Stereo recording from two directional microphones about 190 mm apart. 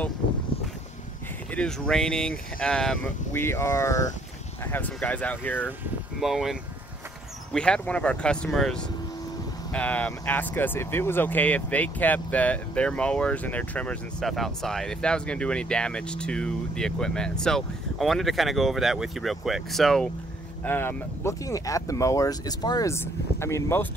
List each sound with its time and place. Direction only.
1.5 s speech: 5° left (ahead or behind)
3.4 s speech: 15° left (ahead or behind)
5.7 s speech: centre (ahead or behind)